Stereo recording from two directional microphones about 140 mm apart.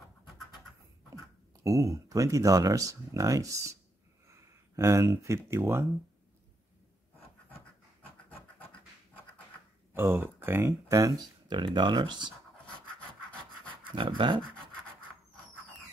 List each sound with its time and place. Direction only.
1.1 s speech: 25° right (ahead or behind)
9.9 s speech: 15° right (ahead or behind); by 12.4 s 35° right (ahead or behind)
13.9 s a sound: 35° right (ahead or behind)